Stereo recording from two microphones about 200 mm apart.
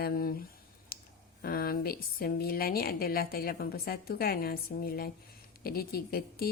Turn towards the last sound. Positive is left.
turn(degrees=50)  # may be behind; listen again after turning